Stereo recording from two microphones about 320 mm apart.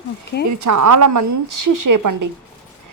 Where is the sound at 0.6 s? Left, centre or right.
Right.